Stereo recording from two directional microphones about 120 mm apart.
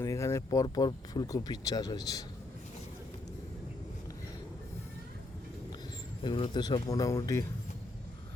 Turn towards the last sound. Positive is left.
turn(degrees=25)  # may be behind; listen again after turning